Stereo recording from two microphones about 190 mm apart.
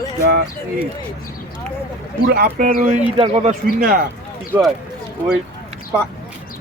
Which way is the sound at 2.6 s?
40° right (ahead or behind).